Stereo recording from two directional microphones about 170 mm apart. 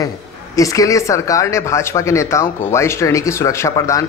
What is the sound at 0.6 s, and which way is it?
Speech, 20° left (ahead or behind).